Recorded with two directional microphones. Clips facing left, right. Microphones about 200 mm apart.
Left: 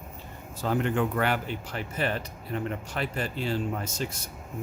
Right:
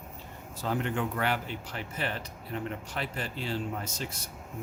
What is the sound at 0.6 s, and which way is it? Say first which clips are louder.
Speech: left 5 dB; 50° left (ahead or behind).